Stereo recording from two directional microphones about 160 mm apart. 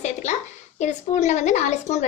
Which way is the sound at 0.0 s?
45° left (ahead or behind).